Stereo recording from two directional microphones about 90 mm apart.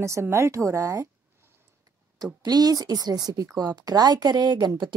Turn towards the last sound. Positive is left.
turn(degrees=-55)  # may be behind; listen again after turning